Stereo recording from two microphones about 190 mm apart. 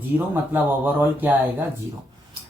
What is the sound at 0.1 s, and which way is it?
Speech, 15° right (ahead or behind).